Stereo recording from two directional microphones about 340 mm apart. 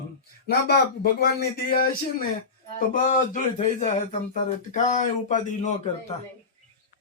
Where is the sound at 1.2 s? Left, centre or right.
Left.